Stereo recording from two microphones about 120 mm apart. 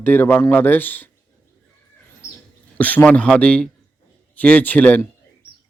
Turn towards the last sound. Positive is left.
turn(degrees=15)  # may be behind; listen again after turning